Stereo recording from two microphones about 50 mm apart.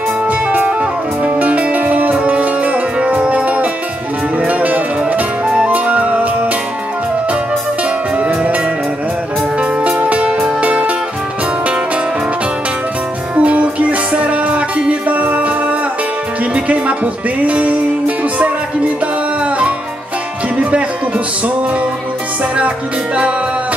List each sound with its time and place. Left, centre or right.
0.3 s music: right
5.4 s flute: centre
5.7 s music: right
8.2 s music: right
9.6 s music: right
13.4 s music: right